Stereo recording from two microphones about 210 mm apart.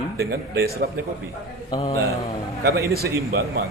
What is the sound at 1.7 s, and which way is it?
Speech, 30° left (ahead or behind).